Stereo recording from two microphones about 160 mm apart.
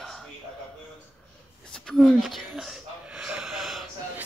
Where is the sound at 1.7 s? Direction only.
5° left (ahead or behind).